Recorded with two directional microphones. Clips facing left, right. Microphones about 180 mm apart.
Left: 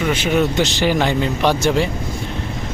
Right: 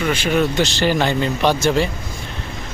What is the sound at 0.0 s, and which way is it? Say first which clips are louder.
Speech: left 1 dB; 20° left (ahead or behind).